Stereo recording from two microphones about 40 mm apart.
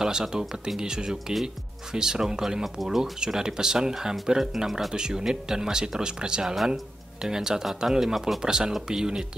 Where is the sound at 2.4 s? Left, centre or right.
Centre.